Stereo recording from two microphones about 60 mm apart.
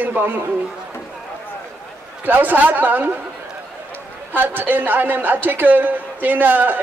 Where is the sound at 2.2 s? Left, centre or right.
Right.